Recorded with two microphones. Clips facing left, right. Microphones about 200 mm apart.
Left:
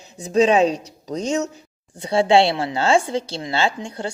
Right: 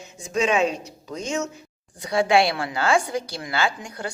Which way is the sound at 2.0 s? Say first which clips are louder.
Left 4 dB; 30° left (ahead or behind).